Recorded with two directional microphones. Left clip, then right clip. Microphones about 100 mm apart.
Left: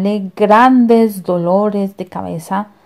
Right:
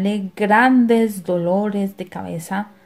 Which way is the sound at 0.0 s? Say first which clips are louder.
Left 7 dB; 55° left (ahead or behind).